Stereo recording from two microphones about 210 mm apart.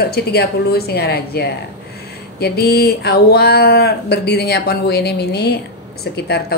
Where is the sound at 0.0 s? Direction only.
50° left (ahead or behind).